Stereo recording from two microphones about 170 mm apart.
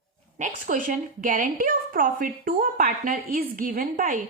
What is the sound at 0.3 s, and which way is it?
A woman's voice, 50° right (ahead or behind).